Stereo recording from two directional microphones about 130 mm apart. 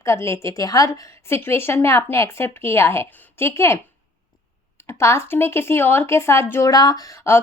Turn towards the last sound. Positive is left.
turn(degrees=20)  # may be behind; listen again after turning